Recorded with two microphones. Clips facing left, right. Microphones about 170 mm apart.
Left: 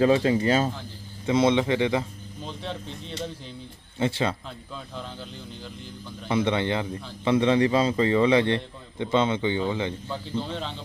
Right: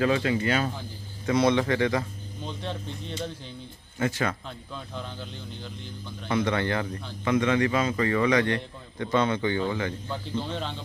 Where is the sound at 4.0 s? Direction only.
25° left (ahead or behind).